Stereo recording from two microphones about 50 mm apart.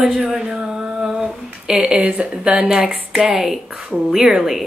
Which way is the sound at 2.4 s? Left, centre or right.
Centre.